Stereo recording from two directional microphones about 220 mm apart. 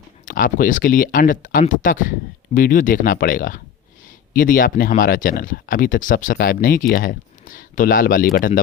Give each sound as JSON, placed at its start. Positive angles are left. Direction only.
{"t": 0.3, "sound": "speech", "side_deg": 40}